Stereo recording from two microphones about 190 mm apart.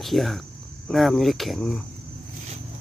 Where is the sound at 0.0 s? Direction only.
Centre (ahead or behind).